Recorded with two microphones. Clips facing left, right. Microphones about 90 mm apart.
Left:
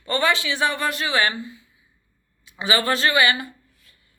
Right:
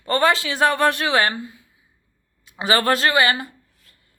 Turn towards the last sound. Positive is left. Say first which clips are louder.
# left 3 dB
turn(degrees=-45)  # may be behind; listen again after turning